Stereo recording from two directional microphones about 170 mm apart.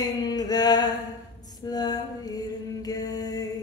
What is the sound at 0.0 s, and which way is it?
Music, 25° left (ahead or behind).